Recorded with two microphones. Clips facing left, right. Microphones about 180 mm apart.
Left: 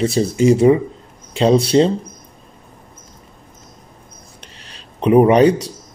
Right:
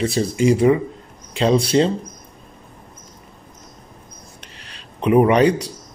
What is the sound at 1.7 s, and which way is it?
Speech, 30° left (ahead or behind).